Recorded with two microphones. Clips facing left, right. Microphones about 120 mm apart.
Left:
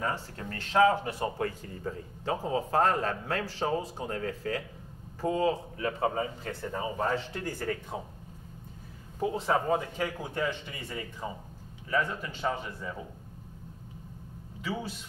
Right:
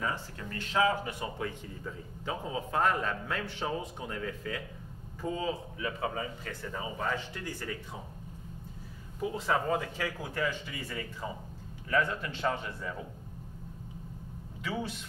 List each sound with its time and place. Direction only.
0.0 s a man's voice: 40° left (ahead or behind)
7.3 s speech: 50° left (ahead or behind)
9.2 s speech: 25° left (ahead or behind)
11.9 s speech: 10° left (ahead or behind)